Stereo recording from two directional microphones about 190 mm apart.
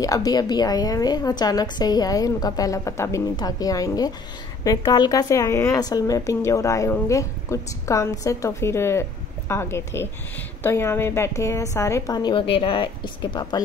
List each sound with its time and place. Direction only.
0.0 s a woman's voice: 20° left (ahead or behind)